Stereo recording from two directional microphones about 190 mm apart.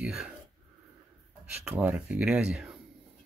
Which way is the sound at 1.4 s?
5° right (ahead or behind).